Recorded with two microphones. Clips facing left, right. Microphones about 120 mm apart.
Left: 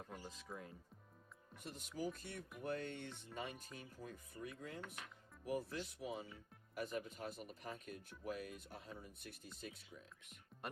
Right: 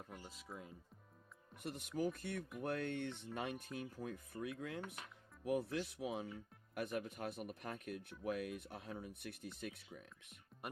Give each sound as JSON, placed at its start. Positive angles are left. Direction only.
{"t": 0.1, "sound": "music", "side_deg": -5}
{"t": 1.5, "sound": "speech", "side_deg": -60}
{"t": 10.5, "sound": "music", "side_deg": 0}